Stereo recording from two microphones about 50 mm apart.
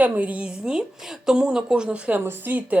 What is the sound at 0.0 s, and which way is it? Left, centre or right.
Speech, right.